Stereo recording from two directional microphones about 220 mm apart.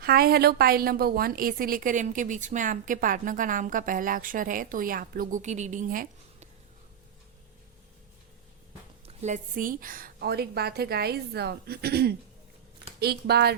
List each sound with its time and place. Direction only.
0.0 s a woman's voice: 45° right (ahead or behind)
9.0 s a woman's voice: 30° right (ahead or behind)